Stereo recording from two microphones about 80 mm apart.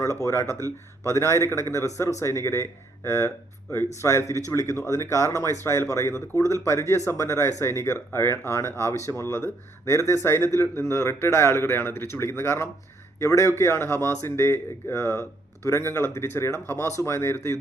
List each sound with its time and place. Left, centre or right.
0.0 s speech: left
0.6 s speech: right
1.1 s speech: left